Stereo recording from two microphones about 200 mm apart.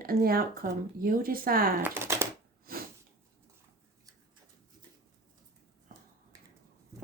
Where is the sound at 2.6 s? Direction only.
50° right (ahead or behind).